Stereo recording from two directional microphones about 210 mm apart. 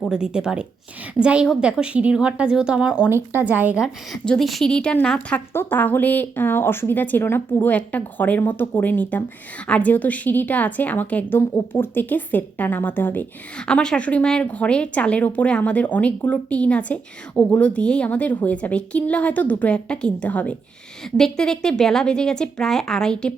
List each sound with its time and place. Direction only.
0.0 s a woman's voice: 5° right (ahead or behind)